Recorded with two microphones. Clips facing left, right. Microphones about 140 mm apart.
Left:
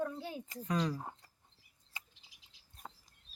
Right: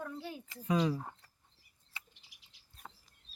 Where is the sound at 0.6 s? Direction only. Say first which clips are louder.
Right 4 dB; 5° right (ahead or behind).